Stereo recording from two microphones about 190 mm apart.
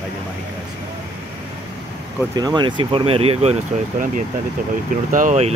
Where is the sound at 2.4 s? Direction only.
20° right (ahead or behind).